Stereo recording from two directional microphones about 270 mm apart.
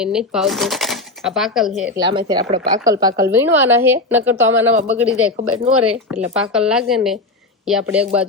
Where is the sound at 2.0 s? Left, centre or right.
Centre.